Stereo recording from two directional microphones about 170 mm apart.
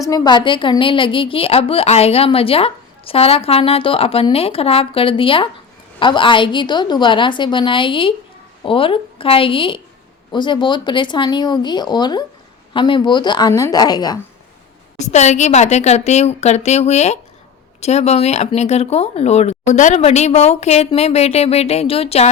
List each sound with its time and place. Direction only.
0.0 s a woman's voice: 25° left (ahead or behind)
14.9 s a woman's voice: 40° left (ahead or behind)